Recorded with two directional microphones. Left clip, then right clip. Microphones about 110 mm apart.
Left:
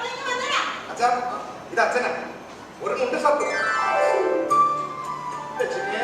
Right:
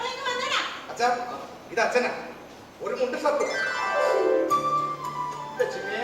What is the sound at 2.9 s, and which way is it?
Speech, 45° left (ahead or behind).